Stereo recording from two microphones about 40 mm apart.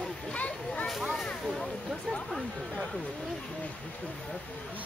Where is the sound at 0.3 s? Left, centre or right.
Left.